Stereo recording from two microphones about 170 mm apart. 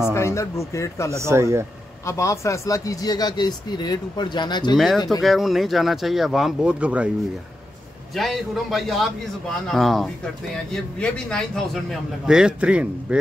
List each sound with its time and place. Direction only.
0.1 s speech: 15° left (ahead or behind)
1.1 s speech: 15° right (ahead or behind)
2.0 s speech: 20° left (ahead or behind)
4.7 s a man's voice: centre (ahead or behind)
8.1 s a man's voice: centre (ahead or behind)